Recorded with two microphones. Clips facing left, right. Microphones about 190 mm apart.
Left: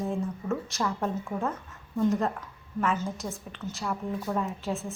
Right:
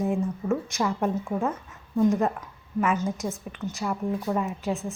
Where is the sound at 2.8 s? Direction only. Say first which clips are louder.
Right 3 dB; 5° right (ahead or behind).